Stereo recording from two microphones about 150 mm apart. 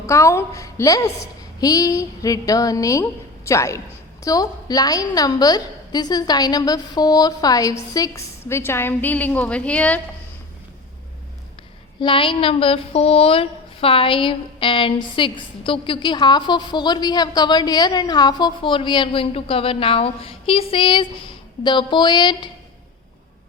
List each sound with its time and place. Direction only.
0.1 s a woman's voice: 20° left (ahead or behind)
11.9 s a woman's voice: 35° left (ahead or behind)